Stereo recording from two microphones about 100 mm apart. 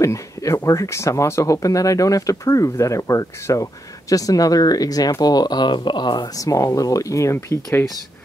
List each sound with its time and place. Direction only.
0.0 s speech: 30° left (ahead or behind)